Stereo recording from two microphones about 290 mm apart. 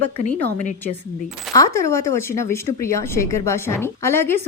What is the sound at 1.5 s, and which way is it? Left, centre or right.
A woman's voice, centre.